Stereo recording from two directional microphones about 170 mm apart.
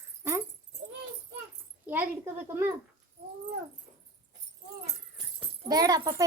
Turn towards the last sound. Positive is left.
turn(degrees=-20)  # may be behind; listen again after turning